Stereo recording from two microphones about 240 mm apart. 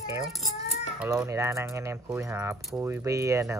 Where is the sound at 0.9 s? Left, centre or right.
Centre.